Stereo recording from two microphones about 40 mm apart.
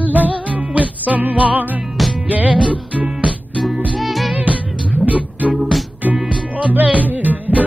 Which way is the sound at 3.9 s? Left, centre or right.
Centre.